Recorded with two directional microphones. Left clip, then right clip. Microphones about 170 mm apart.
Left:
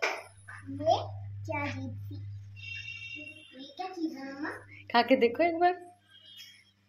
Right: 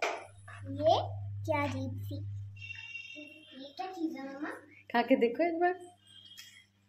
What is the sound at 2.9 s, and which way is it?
Music, centre (ahead or behind).